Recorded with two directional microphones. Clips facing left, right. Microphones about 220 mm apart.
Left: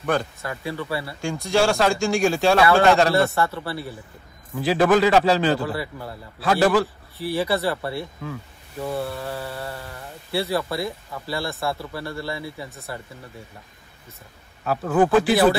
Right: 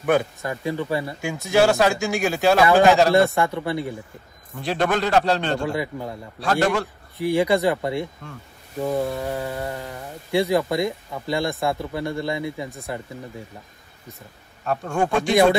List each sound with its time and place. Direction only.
0.0 s a man's voice: 10° right (ahead or behind)
1.2 s speech: 5° right (ahead or behind)
2.6 s a man's voice: 15° right (ahead or behind)
2.9 s speech: centre (ahead or behind)
3.3 s a man's voice: 15° right (ahead or behind)
4.6 s speech: centre (ahead or behind)
5.7 s a man's voice: 15° right (ahead or behind)
6.4 s speech: centre (ahead or behind)
7.2 s a man's voice: 15° right (ahead or behind)
14.6 s speech: 5° left (ahead or behind)